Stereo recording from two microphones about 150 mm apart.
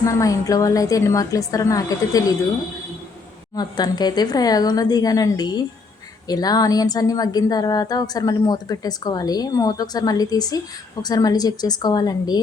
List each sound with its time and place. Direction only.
0.0 s a woman's voice: 20° left (ahead or behind)
3.5 s a woman's voice: 25° left (ahead or behind)